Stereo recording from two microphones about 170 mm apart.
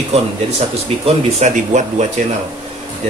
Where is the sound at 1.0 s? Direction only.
45° right (ahead or behind).